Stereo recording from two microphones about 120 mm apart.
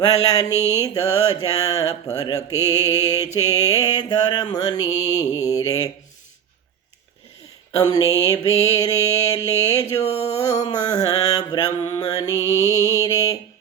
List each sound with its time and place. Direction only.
0.3 s mantra: 30° left (ahead or behind)
7.9 s mantra: 30° left (ahead or behind)
10.0 s music: 60° left (ahead or behind)
10.5 s mantra: 30° left (ahead or behind)